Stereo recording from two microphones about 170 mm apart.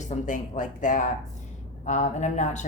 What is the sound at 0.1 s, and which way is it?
A woman's voice, 50° left (ahead or behind).